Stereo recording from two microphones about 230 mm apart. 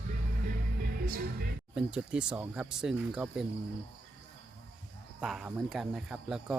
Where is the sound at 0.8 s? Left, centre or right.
Right.